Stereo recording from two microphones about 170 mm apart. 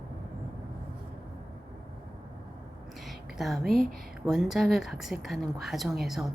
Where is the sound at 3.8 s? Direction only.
55° right (ahead or behind).